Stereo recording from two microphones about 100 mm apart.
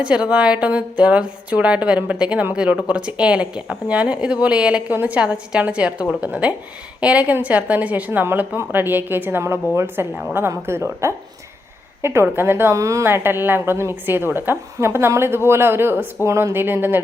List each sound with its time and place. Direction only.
0.0 s speech: 10° right (ahead or behind)